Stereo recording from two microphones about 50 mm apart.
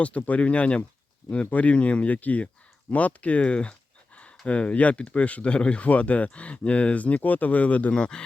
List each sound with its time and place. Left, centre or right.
0.0 s speech: left
7.9 s speech: centre